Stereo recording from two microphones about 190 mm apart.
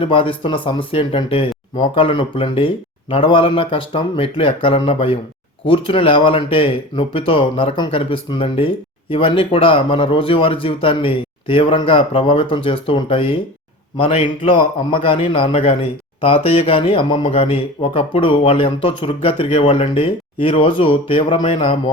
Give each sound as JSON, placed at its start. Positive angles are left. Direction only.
{"t": 0.0, "sound": "speech", "side_deg": 30}